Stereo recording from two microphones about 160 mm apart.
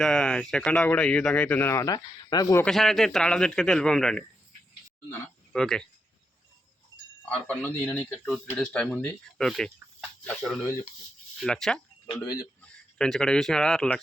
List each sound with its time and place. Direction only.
0.0 s speech: 5° left (ahead or behind); by 2.6 s 20° left (ahead or behind)
2.6 s a man's voice: centre (ahead or behind)
5.5 s a man's voice: 5° left (ahead or behind)
7.4 s a man's voice: 10° left (ahead or behind)
12.2 s speech: 25° left (ahead or behind)
12.6 s speech: 5° left (ahead or behind)